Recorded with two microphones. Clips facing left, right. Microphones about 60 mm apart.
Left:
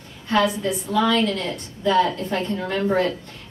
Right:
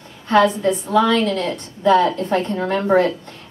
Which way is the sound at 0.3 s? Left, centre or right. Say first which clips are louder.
Right 5 dB; right.